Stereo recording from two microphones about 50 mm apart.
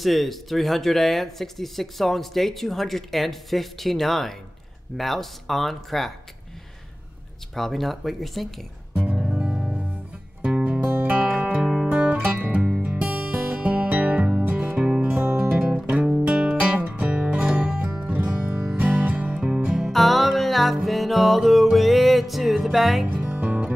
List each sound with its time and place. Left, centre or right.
0.0 s speech: centre
7.5 s speech: centre
8.9 s music: right
10.4 s music: right
11.5 s music: centre
11.9 s music: right
12.2 s music: right
19.9 s music: centre
23.3 s music: right